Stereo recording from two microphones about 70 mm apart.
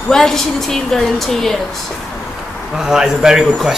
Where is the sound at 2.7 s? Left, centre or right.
Centre.